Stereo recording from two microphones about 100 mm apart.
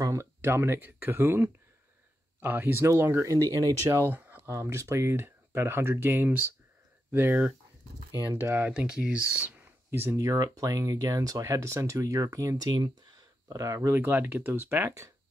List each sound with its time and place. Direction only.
0.0 s a sound: 35° right (ahead or behind)
0.4 s speech: 25° right (ahead or behind)
9.8 s speech: 25° right (ahead or behind)